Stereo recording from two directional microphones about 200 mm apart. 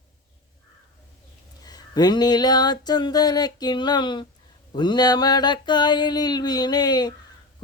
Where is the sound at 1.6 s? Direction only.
20° left (ahead or behind).